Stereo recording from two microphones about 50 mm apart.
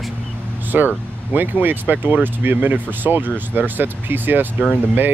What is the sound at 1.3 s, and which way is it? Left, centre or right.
Speech, right.